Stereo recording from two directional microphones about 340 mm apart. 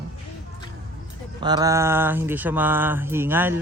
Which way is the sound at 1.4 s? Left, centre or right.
Centre.